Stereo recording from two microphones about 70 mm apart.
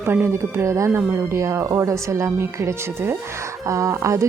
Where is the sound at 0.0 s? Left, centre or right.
Right.